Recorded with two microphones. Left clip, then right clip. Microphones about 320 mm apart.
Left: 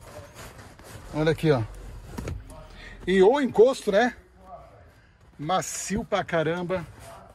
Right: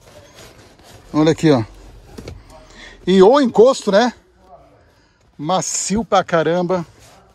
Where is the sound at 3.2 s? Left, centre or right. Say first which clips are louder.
Right 8 dB; right.